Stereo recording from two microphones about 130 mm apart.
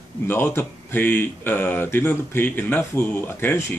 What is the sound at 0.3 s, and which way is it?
Speech, 15° left (ahead or behind).